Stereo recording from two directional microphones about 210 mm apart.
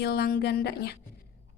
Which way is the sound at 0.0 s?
50° left (ahead or behind).